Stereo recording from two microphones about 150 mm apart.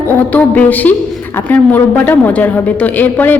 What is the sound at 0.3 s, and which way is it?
A woman's voice, 10° left (ahead or behind).